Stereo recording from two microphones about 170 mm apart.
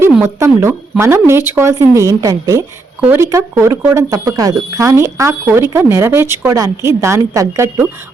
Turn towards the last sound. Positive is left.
turn(degrees=-15)  # may be behind; listen again after turning